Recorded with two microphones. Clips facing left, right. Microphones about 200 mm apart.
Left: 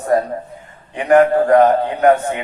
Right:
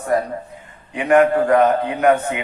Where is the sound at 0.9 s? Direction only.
35° left (ahead or behind).